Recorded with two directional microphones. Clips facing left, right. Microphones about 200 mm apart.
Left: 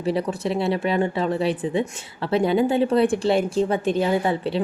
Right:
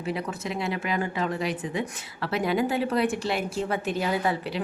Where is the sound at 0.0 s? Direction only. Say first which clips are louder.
Left 7 dB; 30° left (ahead or behind).